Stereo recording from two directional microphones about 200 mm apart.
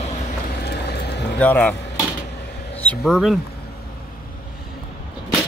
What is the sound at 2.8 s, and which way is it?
Speech, 5° left (ahead or behind).